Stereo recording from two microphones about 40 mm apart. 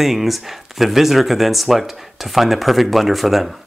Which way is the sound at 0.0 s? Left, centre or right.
Centre.